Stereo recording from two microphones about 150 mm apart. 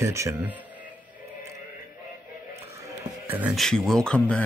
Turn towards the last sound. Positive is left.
turn(degrees=5)  # may be behind; listen again after turning